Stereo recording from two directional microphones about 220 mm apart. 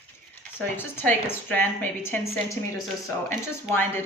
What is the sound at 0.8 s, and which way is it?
Speech, 10° left (ahead or behind).